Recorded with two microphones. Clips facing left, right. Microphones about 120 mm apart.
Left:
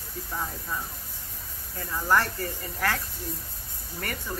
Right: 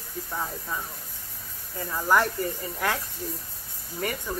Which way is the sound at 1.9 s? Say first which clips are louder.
Right 2 dB; 10° right (ahead or behind).